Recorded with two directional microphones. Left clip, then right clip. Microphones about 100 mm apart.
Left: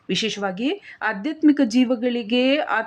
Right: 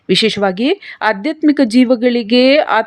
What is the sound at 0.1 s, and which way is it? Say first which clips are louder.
Speech: right 11 dB; 60° right (ahead or behind).